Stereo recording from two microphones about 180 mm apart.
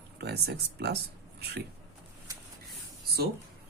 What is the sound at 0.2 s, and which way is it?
Speech, 65° right (ahead or behind).